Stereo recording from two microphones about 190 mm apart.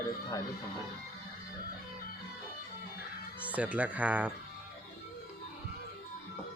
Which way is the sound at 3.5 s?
10° right (ahead or behind).